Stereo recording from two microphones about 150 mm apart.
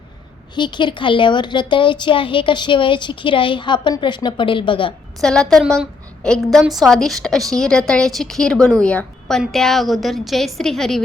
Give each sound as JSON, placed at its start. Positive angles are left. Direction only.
{"t": 0.5, "sound": "a woman's voice", "side_deg": 30}
{"t": 5.2, "sound": "a woman's voice", "side_deg": 5}